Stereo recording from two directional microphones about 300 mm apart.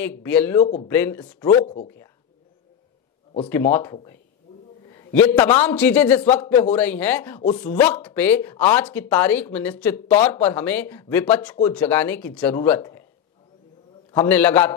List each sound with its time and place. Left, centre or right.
0.0 s speech: centre
0.6 s speech: centre
0.8 s speech: centre
3.7 s speech: centre
7.3 s speech: centre
7.7 s speech: centre
14.1 s speech: centre